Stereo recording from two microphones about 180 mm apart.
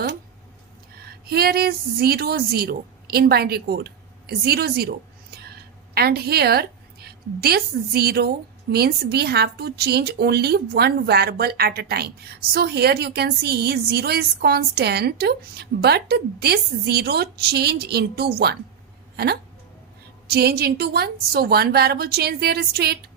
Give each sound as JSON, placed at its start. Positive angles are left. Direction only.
{"t": 0.9, "sound": "a woman's voice", "side_deg": -60}